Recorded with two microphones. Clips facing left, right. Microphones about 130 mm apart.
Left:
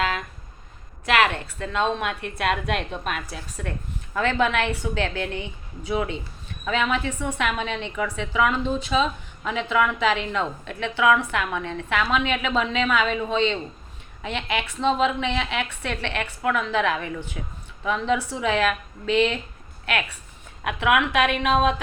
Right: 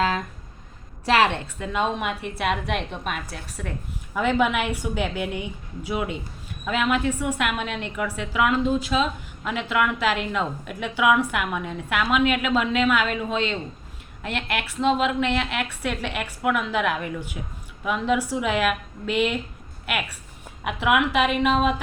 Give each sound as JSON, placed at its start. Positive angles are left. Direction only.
{"t": 0.0, "sound": "a sound", "side_deg": -35}
{"t": 1.0, "sound": "a woman's voice", "side_deg": -30}
{"t": 1.5, "sound": "a woman's voice", "side_deg": -10}
{"t": 4.1, "sound": "a woman's voice", "side_deg": -10}